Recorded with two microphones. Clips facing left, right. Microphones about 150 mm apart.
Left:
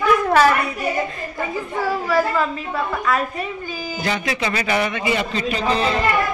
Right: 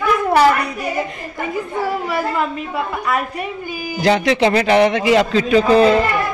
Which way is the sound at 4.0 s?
75° right (ahead or behind).